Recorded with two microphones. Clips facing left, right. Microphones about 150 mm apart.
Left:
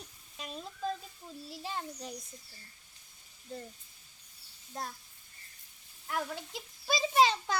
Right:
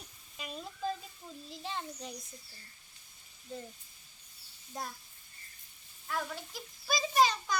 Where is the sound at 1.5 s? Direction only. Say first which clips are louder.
Left 1 dB; 5° left (ahead or behind).